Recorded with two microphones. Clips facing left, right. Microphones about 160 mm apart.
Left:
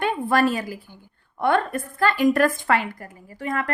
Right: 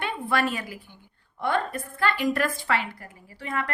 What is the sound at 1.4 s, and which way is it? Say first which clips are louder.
Speech: left 5 dB; 60° left (ahead or behind).